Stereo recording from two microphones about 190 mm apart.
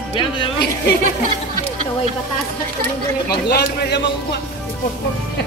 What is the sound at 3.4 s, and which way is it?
Speech, 55° left (ahead or behind).